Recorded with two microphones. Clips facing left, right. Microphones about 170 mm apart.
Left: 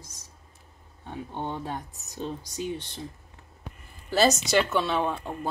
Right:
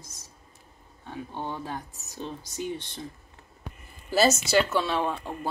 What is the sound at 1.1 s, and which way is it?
Speech, 20° left (ahead or behind).